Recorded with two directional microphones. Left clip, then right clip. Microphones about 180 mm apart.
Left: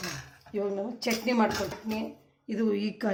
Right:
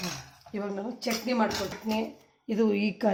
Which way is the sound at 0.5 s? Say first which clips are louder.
Left 3 dB; 15° right (ahead or behind).